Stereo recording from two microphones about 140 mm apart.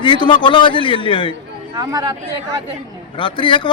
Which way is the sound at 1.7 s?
25° right (ahead or behind).